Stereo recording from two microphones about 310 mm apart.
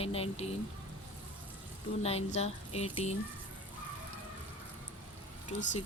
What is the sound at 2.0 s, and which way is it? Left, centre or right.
Speech, centre.